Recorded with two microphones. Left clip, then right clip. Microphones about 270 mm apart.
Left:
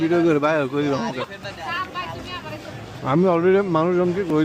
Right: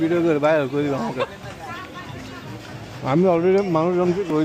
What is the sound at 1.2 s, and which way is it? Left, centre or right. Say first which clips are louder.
Speech: right 4 dB; centre.